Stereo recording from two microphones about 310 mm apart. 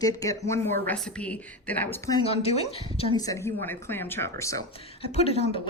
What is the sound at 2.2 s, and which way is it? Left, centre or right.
A woman's voice, centre.